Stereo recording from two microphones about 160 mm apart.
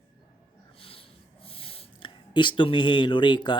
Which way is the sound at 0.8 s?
35° left (ahead or behind).